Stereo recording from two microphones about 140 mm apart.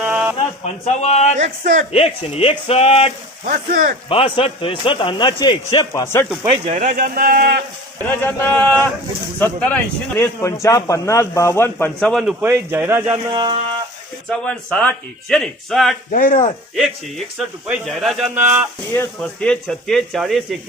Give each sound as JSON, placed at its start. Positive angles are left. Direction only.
{"t": 0.0, "sound": "a sound", "side_deg": -10}
{"t": 0.3, "sound": "a man's voice", "side_deg": 50}
{"t": 1.4, "sound": "speech", "side_deg": -65}
{"t": 1.9, "sound": "speech", "side_deg": 45}
{"t": 3.4, "sound": "speech", "side_deg": -80}
{"t": 4.1, "sound": "a man's voice", "side_deg": 40}
{"t": 6.5, "sound": "speech", "side_deg": -50}
{"t": 8.0, "sound": "a man's voice", "side_deg": 15}
{"t": 11.9, "sound": "speech", "side_deg": 5}
{"t": 12.3, "sound": "speech", "side_deg": -15}
{"t": 13.3, "sound": "speech", "side_deg": -35}
{"t": 14.3, "sound": "speech", "side_deg": 5}
{"t": 16.1, "sound": "speech", "side_deg": 70}
{"t": 16.7, "sound": "speech", "side_deg": 0}